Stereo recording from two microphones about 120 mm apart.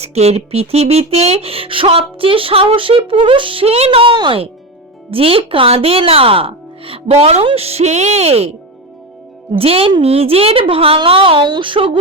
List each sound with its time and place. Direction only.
0.0 s speech: 60° right (ahead or behind); by 11.9 s 45° right (ahead or behind)